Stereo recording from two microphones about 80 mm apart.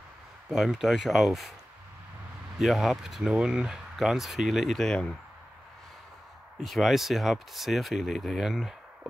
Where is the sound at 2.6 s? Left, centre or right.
Centre.